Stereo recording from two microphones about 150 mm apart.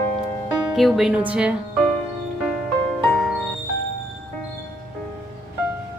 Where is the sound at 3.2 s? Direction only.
Centre (ahead or behind).